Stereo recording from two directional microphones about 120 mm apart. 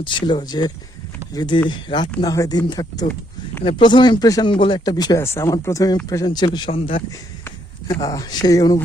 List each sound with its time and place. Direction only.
0.0 s speech: 40° left (ahead or behind)
3.6 s speech: 45° left (ahead or behind)
5.1 s speech: 20° left (ahead or behind)
6.7 s speech: 50° left (ahead or behind)
7.9 s speech: 30° left (ahead or behind)